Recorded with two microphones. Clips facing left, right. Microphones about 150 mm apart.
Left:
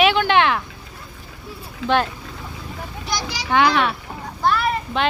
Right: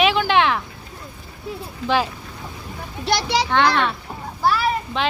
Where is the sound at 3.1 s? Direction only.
65° right (ahead or behind).